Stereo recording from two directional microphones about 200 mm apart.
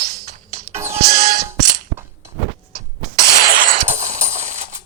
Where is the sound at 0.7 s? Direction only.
15° right (ahead or behind).